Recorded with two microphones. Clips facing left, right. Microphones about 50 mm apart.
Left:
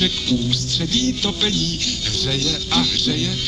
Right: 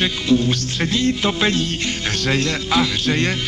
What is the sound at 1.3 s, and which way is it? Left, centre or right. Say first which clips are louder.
A man's voice: right 3 dB; right.